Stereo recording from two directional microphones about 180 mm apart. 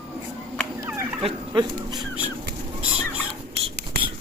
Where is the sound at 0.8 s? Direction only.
10° right (ahead or behind).